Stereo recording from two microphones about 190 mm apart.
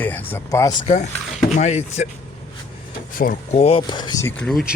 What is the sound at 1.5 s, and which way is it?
Speech, 35° left (ahead or behind).